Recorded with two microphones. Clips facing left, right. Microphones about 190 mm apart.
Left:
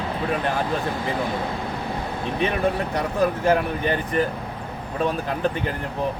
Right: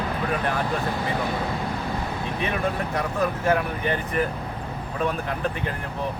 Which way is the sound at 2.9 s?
35° left (ahead or behind).